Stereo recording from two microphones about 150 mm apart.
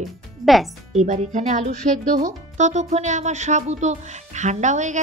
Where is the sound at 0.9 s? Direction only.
50° right (ahead or behind).